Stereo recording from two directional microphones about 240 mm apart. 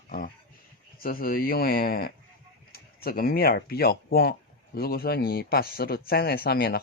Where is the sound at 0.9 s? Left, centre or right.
Left.